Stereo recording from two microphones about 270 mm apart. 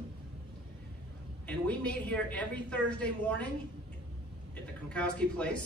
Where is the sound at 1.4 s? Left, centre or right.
Centre.